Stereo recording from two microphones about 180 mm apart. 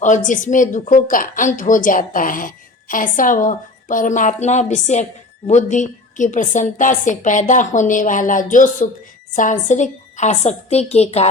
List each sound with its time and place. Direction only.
0.0 s a woman's voice: 45° left (ahead or behind)